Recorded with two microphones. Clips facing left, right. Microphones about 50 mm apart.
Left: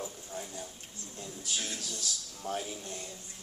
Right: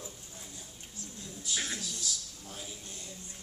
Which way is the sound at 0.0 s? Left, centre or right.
Left.